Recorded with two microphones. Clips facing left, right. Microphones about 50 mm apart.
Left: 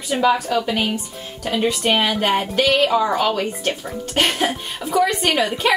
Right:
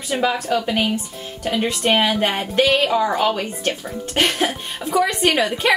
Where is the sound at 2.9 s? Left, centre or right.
Centre.